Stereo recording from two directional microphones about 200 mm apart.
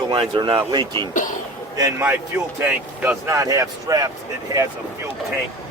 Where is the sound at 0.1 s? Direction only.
25° right (ahead or behind).